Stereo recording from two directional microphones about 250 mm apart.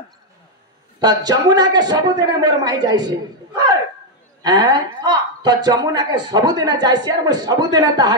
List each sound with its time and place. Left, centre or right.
0.9 s speech: centre
4.4 s speech: centre